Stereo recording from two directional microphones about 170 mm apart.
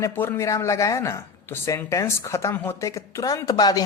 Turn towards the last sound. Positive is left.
turn(degrees=25)  # may be behind; listen again after turning